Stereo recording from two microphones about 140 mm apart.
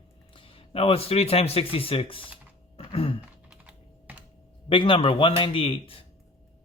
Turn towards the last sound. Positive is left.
turn(degrees=40)  # may be behind; listen again after turning